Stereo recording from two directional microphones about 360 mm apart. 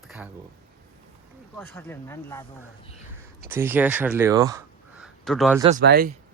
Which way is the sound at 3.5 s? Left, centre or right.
Centre.